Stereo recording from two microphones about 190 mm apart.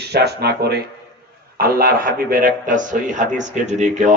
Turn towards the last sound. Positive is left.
turn(degrees=-40)  # may be behind; listen again after turning